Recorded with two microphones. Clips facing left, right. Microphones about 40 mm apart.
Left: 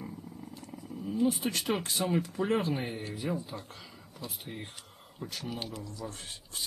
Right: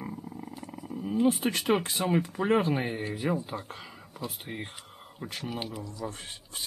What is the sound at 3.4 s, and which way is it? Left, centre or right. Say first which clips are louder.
Speech: right 5 dB; right.